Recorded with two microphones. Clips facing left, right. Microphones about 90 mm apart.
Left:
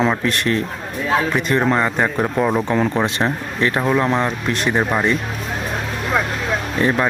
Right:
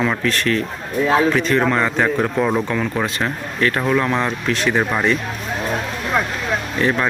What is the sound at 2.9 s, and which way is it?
Speech, 20° left (ahead or behind).